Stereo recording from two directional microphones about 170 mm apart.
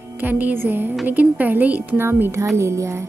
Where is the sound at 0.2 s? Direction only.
10° right (ahead or behind).